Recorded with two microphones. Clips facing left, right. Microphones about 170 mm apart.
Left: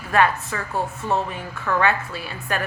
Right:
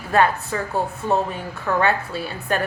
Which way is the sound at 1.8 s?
35° right (ahead or behind).